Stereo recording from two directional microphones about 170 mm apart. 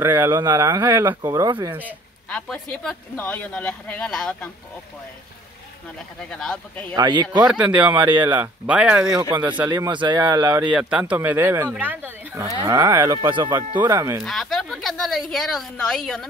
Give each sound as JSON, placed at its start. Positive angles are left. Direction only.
{"t": 0.0, "sound": "speech", "side_deg": -10}
{"t": 0.3, "sound": "speech", "side_deg": -25}
{"t": 2.2, "sound": "speech", "side_deg": 5}
{"t": 6.3, "sound": "a woman's voice", "side_deg": 5}
{"t": 7.0, "sound": "speech", "side_deg": -25}
{"t": 7.4, "sound": "speech", "side_deg": -10}
{"t": 7.9, "sound": "speech", "side_deg": -25}
{"t": 8.6, "sound": "speech", "side_deg": -5}
{"t": 9.0, "sound": "speech", "side_deg": -25}
{"t": 10.6, "sound": "speech", "side_deg": -5}
{"t": 14.2, "sound": "a woman's voice", "side_deg": 0}